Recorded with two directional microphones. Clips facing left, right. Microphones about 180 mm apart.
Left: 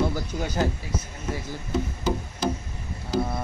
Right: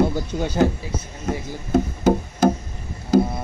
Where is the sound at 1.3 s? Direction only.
50° right (ahead or behind).